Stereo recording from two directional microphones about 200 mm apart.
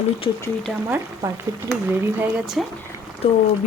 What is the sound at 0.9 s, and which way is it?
Speech, 10° right (ahead or behind).